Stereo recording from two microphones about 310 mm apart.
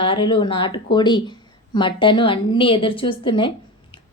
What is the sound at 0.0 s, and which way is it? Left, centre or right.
A woman's voice, centre.